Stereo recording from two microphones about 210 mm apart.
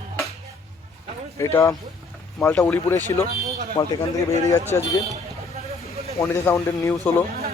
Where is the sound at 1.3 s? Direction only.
15° left (ahead or behind).